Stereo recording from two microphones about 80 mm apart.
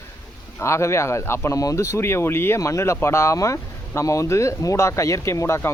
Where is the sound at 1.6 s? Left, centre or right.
Left.